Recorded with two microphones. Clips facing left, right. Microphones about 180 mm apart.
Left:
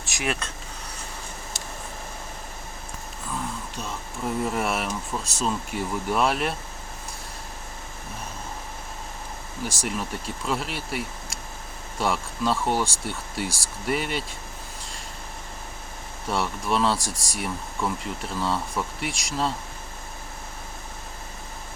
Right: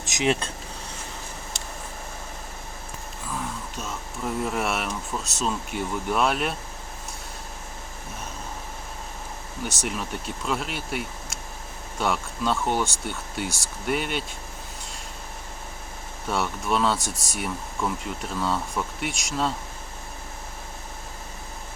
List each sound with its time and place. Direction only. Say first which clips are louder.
0.0 s speech: right 5 dB; 20° right (ahead or behind)
3.2 s speech: left 1 dB; centre (ahead or behind)
9.6 s speech: left 1 dB; centre (ahead or behind)
16.2 s speech: even; centre (ahead or behind)